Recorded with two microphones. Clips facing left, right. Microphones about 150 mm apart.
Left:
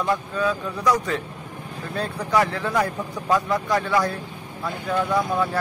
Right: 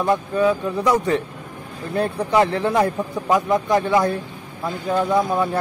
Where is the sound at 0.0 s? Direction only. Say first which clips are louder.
Right 5 dB; 20° right (ahead or behind).